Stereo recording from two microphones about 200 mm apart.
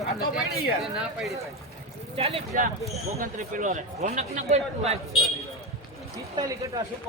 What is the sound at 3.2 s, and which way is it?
A man's voice, 40° right (ahead or behind).